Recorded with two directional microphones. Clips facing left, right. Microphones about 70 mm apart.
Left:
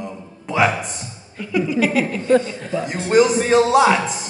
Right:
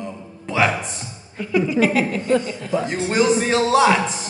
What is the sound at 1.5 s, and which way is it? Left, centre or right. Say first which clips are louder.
Speech: right 1 dB; right.